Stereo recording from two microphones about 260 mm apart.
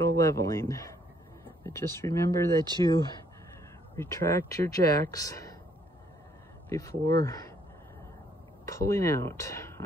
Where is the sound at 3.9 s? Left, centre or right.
Centre.